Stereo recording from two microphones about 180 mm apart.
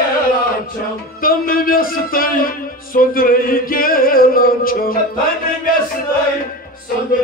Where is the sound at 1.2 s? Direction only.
55° left (ahead or behind).